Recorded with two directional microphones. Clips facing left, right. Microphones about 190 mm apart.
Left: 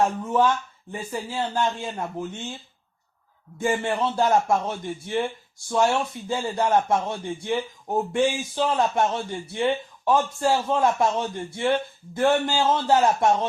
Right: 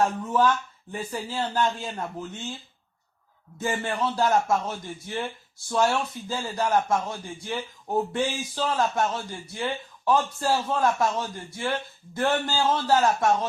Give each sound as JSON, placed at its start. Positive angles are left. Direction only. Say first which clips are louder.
{"t": 0.0, "sound": "speech", "louder": "left 1 dB", "side_deg": 20}
{"t": 1.1, "sound": "speech", "louder": "left 2 dB", "side_deg": 10}
{"t": 1.5, "sound": "speech", "louder": "even", "side_deg": 20}
{"t": 3.6, "sound": "speech", "louder": "left 3 dB", "side_deg": 25}